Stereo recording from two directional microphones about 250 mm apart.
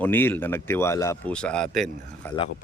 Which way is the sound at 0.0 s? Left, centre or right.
Centre.